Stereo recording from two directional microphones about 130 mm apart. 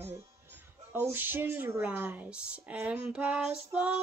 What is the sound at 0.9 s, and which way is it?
Speech, 15° right (ahead or behind).